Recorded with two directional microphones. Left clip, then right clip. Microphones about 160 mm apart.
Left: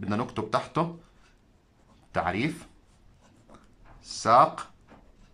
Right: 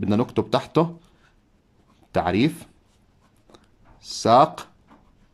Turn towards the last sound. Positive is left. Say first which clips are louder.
# right 4 dB
turn(degrees=-25)  # may be behind; listen again after turning